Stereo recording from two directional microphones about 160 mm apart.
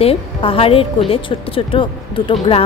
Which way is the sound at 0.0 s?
35° left (ahead or behind).